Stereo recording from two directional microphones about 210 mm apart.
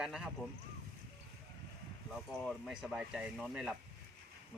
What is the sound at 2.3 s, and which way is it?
Speech, centre (ahead or behind).